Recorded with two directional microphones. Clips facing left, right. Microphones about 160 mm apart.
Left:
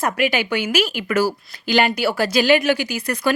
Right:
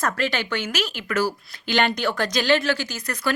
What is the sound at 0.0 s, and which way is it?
Speech, 10° left (ahead or behind).